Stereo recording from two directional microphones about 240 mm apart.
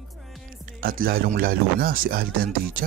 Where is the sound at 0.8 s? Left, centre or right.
Right.